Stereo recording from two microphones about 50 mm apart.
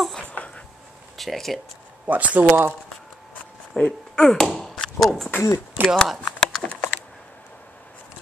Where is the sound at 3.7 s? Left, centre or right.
Centre.